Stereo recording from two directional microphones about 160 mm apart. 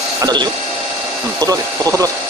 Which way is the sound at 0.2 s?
25° right (ahead or behind).